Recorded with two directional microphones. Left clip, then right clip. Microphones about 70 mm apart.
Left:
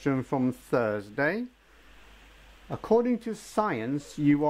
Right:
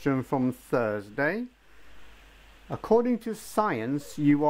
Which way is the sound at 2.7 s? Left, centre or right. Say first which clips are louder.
Right 1 dB; right.